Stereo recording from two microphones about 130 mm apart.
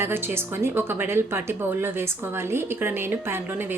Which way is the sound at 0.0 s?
15° right (ahead or behind).